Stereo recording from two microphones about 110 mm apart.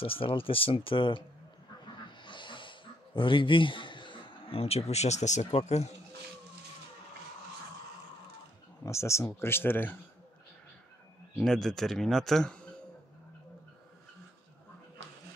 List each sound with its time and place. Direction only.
0.0 s speech: 55° left (ahead or behind)
2.2 s a sound: 45° left (ahead or behind); by 5.9 s 80° left
8.8 s speech: 25° left (ahead or behind)
11.3 s speech: 5° left (ahead or behind)